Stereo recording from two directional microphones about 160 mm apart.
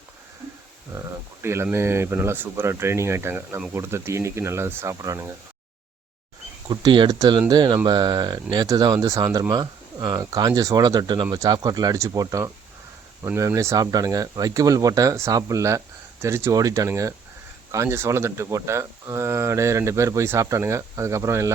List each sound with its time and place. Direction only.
0.9 s speech: 15° right (ahead or behind)
6.7 s speech: 30° right (ahead or behind)